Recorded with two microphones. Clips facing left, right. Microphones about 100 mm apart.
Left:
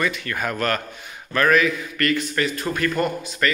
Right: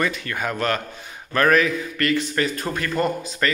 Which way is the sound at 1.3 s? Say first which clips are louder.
Even; 35° right (ahead or behind).